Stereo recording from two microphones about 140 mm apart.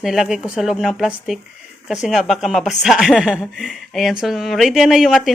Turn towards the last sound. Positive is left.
turn(degrees=-5)  # may be behind; listen again after turning